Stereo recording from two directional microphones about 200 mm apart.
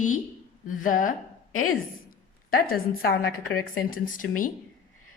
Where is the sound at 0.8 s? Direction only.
40° left (ahead or behind).